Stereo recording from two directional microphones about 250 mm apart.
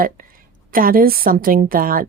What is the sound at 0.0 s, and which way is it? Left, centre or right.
A woman's voice, right.